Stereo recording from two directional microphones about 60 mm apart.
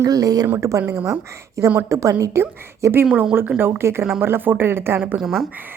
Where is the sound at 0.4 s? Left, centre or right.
Right.